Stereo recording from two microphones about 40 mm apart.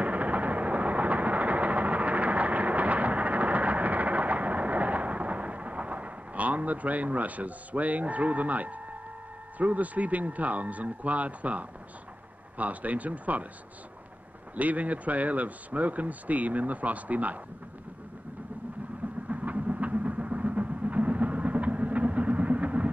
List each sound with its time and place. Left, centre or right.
0.0 s vehicle: right
9.6 s speech: right
14.5 s speech: right
19.2 s vehicle: right